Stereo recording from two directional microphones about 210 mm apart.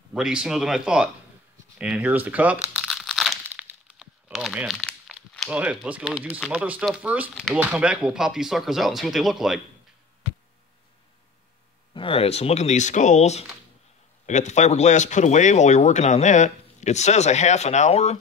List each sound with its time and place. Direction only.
0.1 s speech: 5° right (ahead or behind)
1.8 s crumpling: 5° right (ahead or behind)
3.4 s speech: 5° right (ahead or behind)
11.9 s speech: 25° left (ahead or behind)